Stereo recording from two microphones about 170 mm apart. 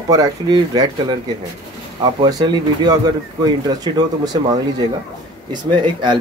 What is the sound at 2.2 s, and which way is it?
Speech, 25° right (ahead or behind).